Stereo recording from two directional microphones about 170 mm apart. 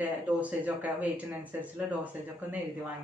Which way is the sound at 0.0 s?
10° right (ahead or behind).